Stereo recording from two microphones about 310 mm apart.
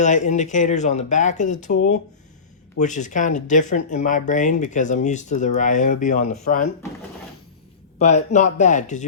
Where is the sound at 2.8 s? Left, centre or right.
Left.